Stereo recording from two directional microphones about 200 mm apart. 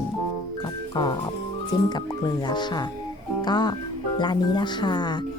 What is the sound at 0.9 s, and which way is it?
Music, 20° left (ahead or behind).